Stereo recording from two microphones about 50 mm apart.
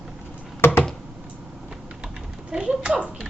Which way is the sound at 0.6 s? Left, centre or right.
Left.